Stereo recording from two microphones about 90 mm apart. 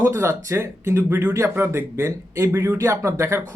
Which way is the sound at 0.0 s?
30° right (ahead or behind).